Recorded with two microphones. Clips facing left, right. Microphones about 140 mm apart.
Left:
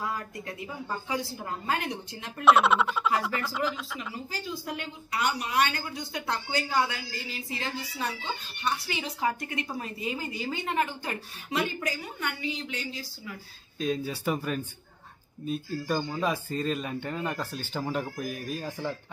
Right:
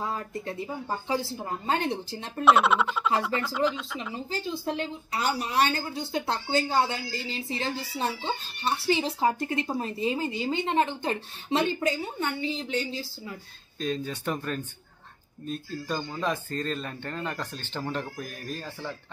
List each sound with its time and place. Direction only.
0.0 s speech: 25° right (ahead or behind)
2.4 s speech: centre (ahead or behind)
4.1 s speech: 25° right (ahead or behind)
13.7 s speech: 5° left (ahead or behind)